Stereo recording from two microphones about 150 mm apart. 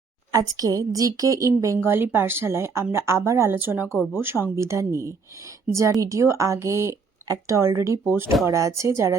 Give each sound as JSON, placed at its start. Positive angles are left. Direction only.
{"t": 0.3, "sound": "a woman's voice", "side_deg": -25}